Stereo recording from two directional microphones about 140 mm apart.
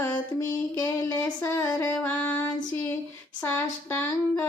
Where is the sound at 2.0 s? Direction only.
10° left (ahead or behind).